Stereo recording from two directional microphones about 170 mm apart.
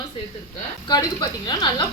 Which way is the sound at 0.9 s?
25° left (ahead or behind).